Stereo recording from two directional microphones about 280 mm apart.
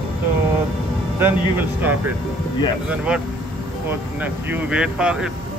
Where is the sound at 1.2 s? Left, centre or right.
Centre.